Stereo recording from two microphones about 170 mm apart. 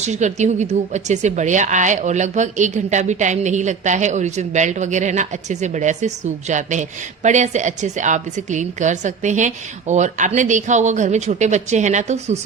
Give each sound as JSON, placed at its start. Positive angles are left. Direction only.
{"t": 0.0, "sound": "a woman's voice", "side_deg": -45}